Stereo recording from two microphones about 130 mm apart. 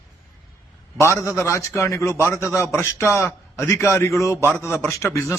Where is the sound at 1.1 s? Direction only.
25° left (ahead or behind).